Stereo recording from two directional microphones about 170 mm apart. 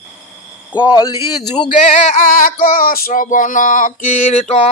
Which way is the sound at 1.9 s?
55° left (ahead or behind).